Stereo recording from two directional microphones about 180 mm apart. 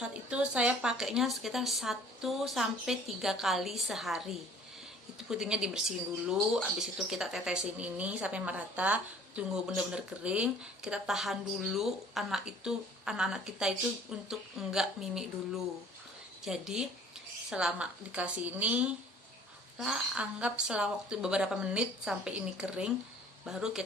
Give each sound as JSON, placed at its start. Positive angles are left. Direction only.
{"t": 0.0, "sound": "speech", "side_deg": -5}
{"t": 16.4, "sound": "a woman's voice", "side_deg": 0}